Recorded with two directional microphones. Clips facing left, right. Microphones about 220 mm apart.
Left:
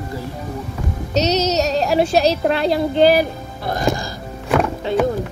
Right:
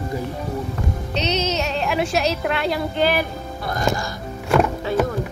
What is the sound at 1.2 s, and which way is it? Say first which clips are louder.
A woman's voice: left 6 dB; 40° left (ahead or behind).